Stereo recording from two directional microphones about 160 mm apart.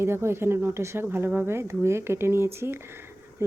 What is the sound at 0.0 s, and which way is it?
Speech, 15° right (ahead or behind).